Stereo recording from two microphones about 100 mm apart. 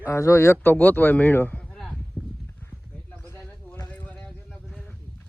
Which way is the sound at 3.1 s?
15° left (ahead or behind).